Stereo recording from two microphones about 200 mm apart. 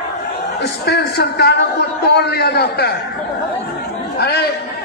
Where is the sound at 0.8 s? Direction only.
55° left (ahead or behind).